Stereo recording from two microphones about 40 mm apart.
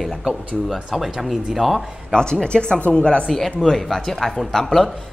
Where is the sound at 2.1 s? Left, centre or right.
Left.